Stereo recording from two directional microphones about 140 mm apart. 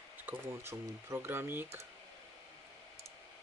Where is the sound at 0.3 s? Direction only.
20° right (ahead or behind).